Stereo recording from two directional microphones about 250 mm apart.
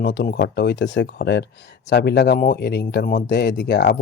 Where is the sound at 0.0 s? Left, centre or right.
Left.